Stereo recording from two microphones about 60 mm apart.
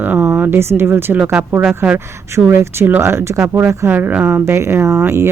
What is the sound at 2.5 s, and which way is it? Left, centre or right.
Speech, right.